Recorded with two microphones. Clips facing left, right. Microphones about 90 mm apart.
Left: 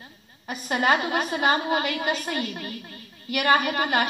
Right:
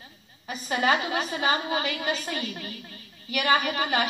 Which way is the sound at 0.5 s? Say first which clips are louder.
Left 2 dB; 45° left (ahead or behind).